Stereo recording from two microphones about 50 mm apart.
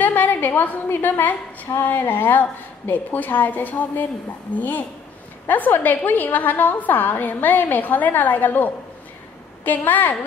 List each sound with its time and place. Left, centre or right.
0.0 s a woman's voice: left